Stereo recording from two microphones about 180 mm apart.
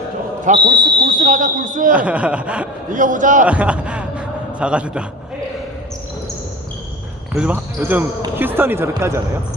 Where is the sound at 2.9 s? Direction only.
45° right (ahead or behind).